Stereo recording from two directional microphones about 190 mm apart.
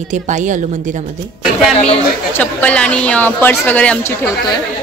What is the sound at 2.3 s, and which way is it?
A woman's voice, 5° left (ahead or behind).